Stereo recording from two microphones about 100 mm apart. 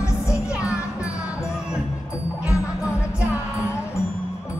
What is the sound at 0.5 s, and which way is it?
Music, 10° right (ahead or behind).